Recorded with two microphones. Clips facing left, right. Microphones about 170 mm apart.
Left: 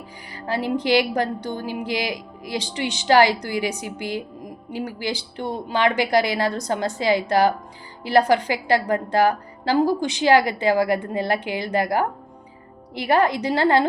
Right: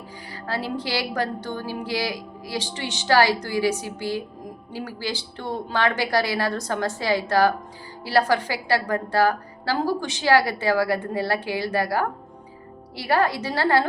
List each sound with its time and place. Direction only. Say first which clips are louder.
0.3 s a woman's voice: left 4 dB; 15° left (ahead or behind)